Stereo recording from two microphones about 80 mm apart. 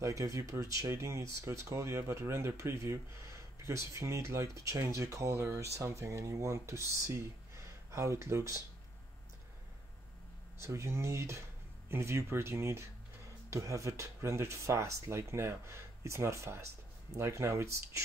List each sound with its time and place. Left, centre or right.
0.0 s speech: right
10.6 s speech: right